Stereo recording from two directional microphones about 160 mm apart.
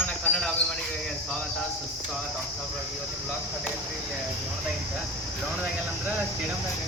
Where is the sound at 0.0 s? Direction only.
5° left (ahead or behind).